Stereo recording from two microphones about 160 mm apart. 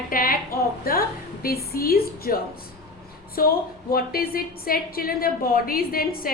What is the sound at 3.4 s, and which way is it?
A woman's voice, 65° left (ahead or behind).